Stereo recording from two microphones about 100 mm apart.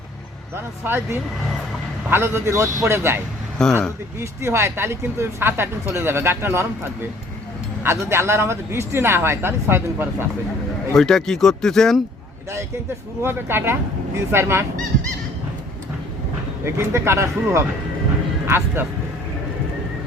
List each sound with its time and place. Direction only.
0.5 s speech: 25° right (ahead or behind)
3.6 s speech: 5° left (ahead or behind)
4.2 s speech: 25° right (ahead or behind)
7.9 s speech: 25° right (ahead or behind)
10.9 s speech: 5° left (ahead or behind)
13.2 s speech: 25° right (ahead or behind)
16.6 s speech: 25° right (ahead or behind)